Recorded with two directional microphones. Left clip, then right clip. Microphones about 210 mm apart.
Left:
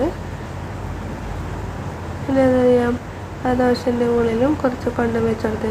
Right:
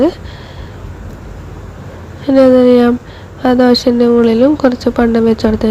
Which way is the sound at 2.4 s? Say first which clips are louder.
Right 8 dB; 35° right (ahead or behind).